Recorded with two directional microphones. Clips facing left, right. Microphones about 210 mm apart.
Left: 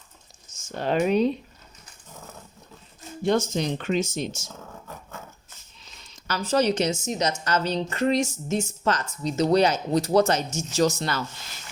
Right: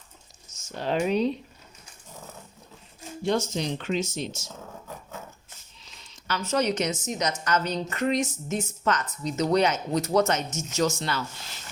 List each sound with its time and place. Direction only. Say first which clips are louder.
0.8 s speech: left 3 dB; 55° left (ahead or behind)
3.2 s speech: left 3 dB; 50° left (ahead or behind)
6.2 s a woman's voice: left 3 dB; 35° left (ahead or behind)